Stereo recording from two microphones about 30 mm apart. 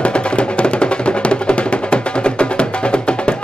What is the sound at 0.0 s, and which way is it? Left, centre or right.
Music, left.